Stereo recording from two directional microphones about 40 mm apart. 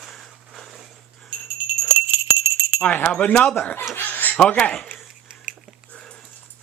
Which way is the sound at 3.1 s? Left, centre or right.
Left.